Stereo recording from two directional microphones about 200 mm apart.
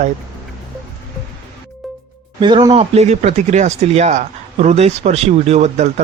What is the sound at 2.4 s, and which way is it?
Speech, 25° right (ahead or behind).